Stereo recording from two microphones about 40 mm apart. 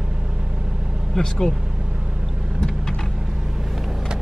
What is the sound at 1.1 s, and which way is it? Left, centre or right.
Vehicle, centre.